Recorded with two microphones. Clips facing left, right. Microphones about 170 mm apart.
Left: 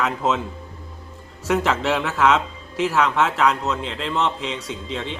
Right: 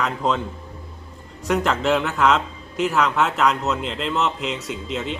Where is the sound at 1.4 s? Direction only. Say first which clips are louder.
Even; centre (ahead or behind).